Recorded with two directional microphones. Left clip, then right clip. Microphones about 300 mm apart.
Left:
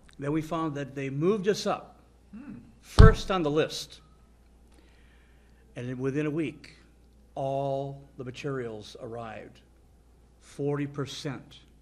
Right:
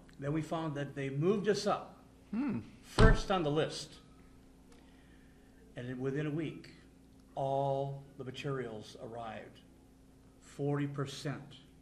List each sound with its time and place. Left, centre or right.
0.2 s speech: left
2.8 s speech: left
5.8 s a man's voice: left